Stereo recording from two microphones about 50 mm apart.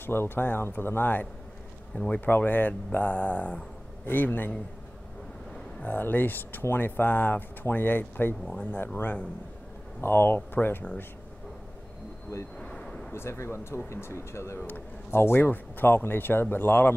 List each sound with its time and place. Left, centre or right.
0.0 s speech: left
4.0 s speech: left
5.9 s speech: left
10.0 s speech: left
12.5 s a sound: centre
13.1 s speech: left
14.7 s speech: left